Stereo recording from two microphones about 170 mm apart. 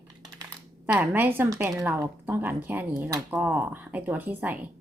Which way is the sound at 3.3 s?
10° right (ahead or behind).